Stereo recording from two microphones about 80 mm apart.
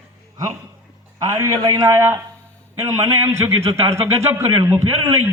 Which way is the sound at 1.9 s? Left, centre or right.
Right.